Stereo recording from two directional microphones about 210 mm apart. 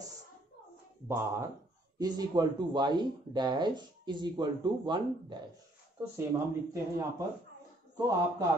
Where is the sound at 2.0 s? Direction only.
20° right (ahead or behind).